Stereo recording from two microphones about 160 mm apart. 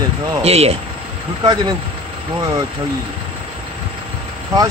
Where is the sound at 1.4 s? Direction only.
25° right (ahead or behind).